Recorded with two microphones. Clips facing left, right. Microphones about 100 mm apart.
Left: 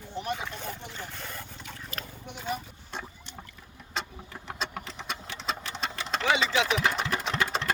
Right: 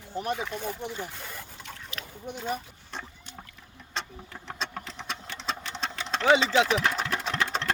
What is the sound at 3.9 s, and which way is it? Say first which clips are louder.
Engine: left 1 dB; 5° left (ahead or behind).